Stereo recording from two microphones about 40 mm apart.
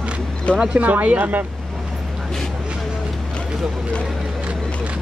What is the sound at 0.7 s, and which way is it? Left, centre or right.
Speech, right.